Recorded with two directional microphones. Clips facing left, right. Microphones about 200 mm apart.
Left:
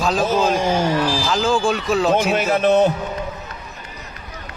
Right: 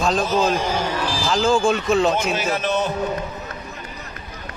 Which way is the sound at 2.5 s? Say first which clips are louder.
Left 10 dB; 55° left (ahead or behind).